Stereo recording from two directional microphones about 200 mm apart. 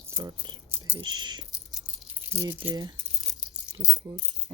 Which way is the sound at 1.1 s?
20° right (ahead or behind).